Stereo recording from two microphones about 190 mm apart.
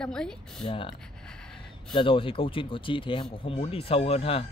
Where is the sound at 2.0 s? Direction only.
25° left (ahead or behind).